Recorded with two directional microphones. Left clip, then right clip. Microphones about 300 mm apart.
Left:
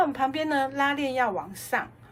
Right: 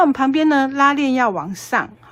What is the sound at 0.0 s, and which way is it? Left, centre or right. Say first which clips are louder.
A woman's voice: right 9 dB; right.